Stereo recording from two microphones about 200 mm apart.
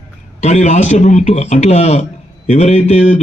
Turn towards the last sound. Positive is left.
turn(degrees=35)  # may be behind; listen again after turning